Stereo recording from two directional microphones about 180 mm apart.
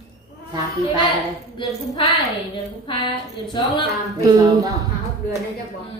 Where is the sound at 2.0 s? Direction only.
30° left (ahead or behind).